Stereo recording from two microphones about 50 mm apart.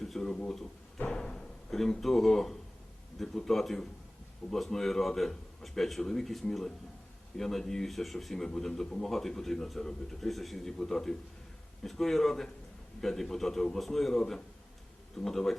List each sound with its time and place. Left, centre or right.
0.0 s speech: centre
0.9 s a sound: left
1.2 s music: centre
3.2 s a man's voice: centre